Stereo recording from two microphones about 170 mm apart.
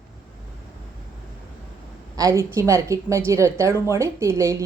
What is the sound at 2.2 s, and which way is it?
A woman's voice, 20° right (ahead or behind).